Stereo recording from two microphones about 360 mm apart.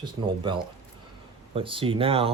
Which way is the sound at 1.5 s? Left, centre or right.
Centre.